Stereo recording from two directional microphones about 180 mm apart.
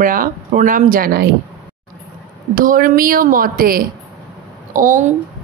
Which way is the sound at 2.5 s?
50° right (ahead or behind).